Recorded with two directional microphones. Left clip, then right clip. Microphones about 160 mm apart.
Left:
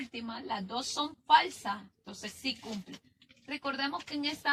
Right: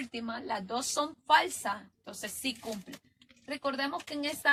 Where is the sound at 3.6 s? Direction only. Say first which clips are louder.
Right 1 dB; 35° right (ahead or behind).